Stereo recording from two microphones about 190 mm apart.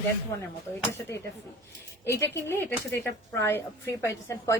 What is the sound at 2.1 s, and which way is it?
A woman's voice, 15° left (ahead or behind).